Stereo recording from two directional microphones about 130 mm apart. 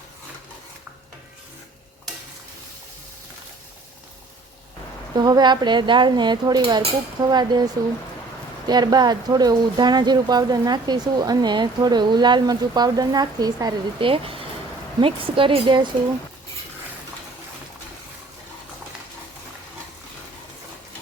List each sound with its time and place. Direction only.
5.1 s speech: 30° right (ahead or behind)
14.0 s speech: 40° right (ahead or behind)